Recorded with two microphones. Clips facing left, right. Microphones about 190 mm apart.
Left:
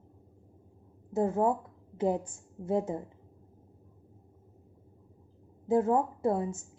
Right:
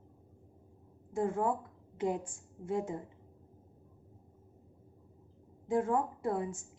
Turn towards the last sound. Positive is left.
turn(degrees=30)  # may be behind; listen again after turning